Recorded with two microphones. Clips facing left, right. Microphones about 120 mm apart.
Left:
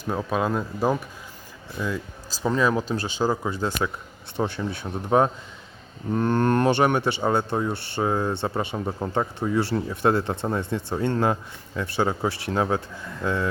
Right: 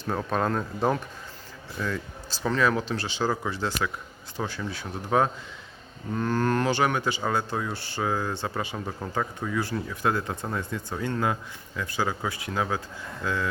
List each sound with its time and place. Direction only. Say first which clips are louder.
0.0 s speech: left 2 dB; 10° left (ahead or behind); by 13.5 s 25° left (ahead or behind)